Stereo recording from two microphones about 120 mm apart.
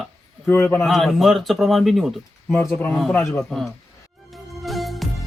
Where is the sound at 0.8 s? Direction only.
Centre (ahead or behind).